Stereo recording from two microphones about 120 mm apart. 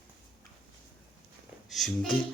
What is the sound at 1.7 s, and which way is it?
Speech, centre (ahead or behind).